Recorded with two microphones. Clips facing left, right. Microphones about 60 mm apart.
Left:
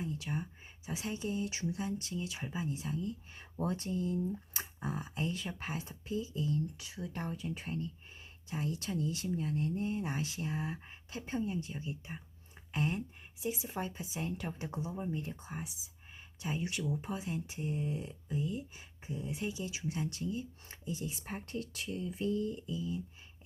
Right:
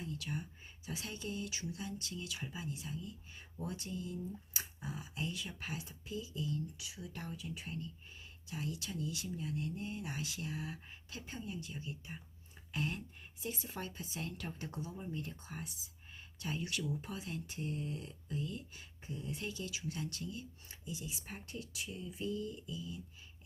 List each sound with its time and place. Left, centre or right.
0.0 s a sound: left
0.9 s speech: left
13.4 s speech: centre
20.7 s speech: left